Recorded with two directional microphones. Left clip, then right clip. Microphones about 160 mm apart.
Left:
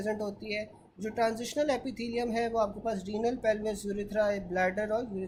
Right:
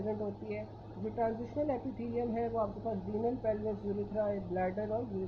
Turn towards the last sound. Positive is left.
turn(degrees=35)  # may be behind; listen again after turning